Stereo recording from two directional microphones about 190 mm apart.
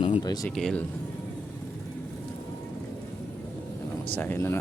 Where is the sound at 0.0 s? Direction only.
25° left (ahead or behind).